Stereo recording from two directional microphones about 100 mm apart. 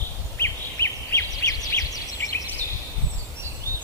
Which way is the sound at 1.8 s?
35° left (ahead or behind).